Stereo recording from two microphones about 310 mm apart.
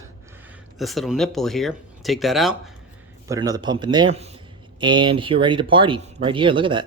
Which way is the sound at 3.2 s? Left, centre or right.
Centre.